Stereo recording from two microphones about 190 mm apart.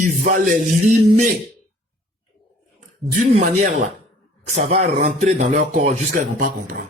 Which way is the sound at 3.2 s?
40° right (ahead or behind).